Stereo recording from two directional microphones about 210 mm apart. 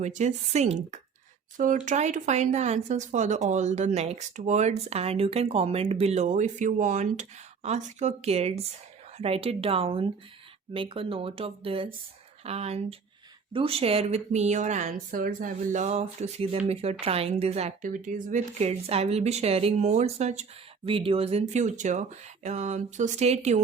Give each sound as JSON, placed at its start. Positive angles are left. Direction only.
{"t": 0.0, "sound": "speech", "side_deg": -35}